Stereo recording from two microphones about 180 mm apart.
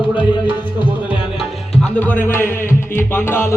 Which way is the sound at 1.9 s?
10° left (ahead or behind).